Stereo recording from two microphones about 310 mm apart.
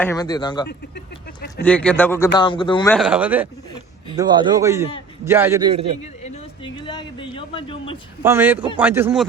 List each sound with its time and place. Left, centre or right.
0.0 s a man's voice: centre
2.9 s a man's voice: centre
6.8 s a man's voice: centre
8.2 s a man's voice: centre